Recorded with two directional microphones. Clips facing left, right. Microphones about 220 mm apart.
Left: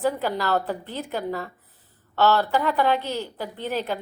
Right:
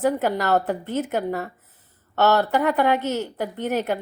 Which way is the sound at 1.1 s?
50° right (ahead or behind).